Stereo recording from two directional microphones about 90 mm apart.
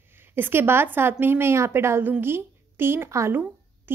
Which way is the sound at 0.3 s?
25° right (ahead or behind).